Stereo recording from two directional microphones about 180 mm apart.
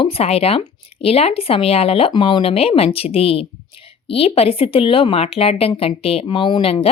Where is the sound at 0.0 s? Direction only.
35° left (ahead or behind).